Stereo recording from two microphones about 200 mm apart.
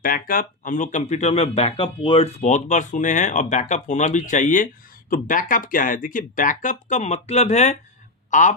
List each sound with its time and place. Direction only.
0.0 s a man's voice: 45° left (ahead or behind)